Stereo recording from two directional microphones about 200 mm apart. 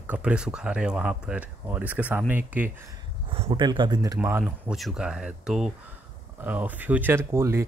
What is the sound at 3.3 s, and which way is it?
Speech, 25° right (ahead or behind).